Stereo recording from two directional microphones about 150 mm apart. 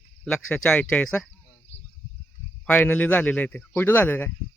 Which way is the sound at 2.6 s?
10° left (ahead or behind).